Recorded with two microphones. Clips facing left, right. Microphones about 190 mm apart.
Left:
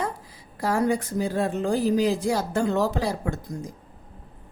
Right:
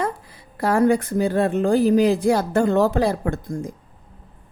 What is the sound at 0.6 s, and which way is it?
Speech, 60° right (ahead or behind).